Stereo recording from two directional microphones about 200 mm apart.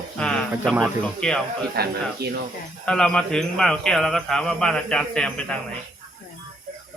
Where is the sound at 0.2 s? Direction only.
5° left (ahead or behind).